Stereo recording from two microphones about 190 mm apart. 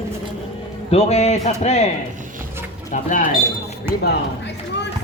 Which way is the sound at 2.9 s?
45° left (ahead or behind).